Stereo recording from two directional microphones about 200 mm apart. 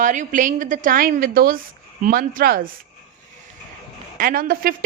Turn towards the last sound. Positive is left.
turn(degrees=-45)  # may be behind; listen again after turning